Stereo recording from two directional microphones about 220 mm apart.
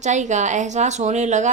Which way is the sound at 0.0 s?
35° right (ahead or behind).